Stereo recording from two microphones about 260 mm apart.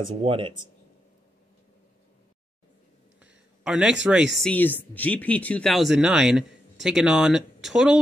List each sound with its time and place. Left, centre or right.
0.0 s speech: right
3.2 s speech: centre